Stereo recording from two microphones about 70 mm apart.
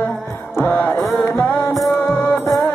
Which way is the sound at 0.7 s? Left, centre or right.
Left.